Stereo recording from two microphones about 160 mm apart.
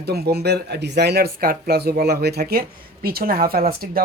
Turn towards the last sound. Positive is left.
turn(degrees=-70)  # may be behind; listen again after turning